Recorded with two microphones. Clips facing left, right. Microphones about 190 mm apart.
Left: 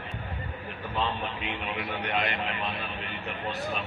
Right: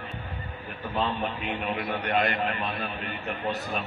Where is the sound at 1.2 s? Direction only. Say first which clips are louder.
Right 4 dB; 45° right (ahead or behind).